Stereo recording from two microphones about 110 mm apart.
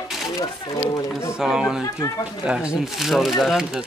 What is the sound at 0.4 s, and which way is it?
Speech, 30° left (ahead or behind).